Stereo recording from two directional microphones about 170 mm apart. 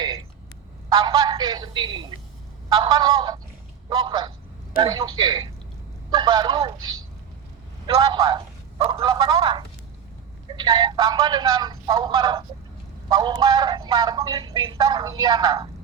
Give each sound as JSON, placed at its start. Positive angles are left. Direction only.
{"t": 0.9, "sound": "speech", "side_deg": -25}